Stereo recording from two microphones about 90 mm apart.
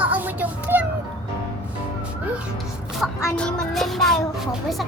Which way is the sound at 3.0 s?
Centre (ahead or behind).